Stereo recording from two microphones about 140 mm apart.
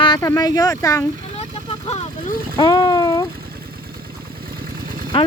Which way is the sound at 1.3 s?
45° left (ahead or behind).